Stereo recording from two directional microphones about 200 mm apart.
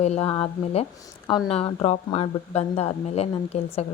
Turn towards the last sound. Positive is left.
turn(degrees=30)  # may be behind; listen again after turning